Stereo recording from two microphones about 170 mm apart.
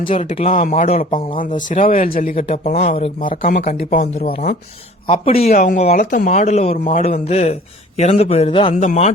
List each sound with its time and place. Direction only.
0.1 s speech: 40° left (ahead or behind)
1.4 s speech: 50° left (ahead or behind)
2.3 s a man's voice: 40° left (ahead or behind)
3.2 s a man's voice: 55° left (ahead or behind); by 5.5 s 35° left (ahead or behind)
5.5 s a man's voice: 50° left (ahead or behind); by 8.7 s 30° left (ahead or behind)
8.7 s speech: 45° left (ahead or behind)